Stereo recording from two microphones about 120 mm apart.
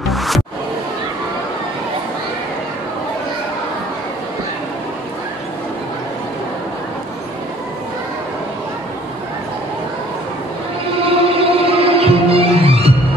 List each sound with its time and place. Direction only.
0.1 s music: centre (ahead or behind)
11.0 s music: 50° right (ahead or behind)